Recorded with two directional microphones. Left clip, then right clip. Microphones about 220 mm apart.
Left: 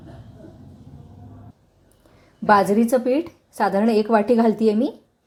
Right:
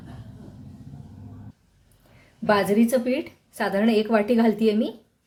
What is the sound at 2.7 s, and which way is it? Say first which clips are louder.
A woman's voice: left 3 dB; 20° left (ahead or behind).